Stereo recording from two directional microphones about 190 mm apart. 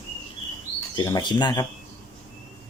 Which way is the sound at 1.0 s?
20° left (ahead or behind).